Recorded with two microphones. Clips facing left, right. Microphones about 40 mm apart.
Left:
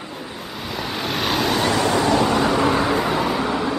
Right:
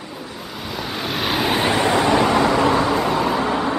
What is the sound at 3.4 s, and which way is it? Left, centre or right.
Vehicle, right.